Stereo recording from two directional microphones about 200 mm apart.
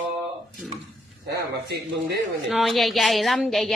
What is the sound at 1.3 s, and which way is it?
Speech, 50° right (ahead or behind).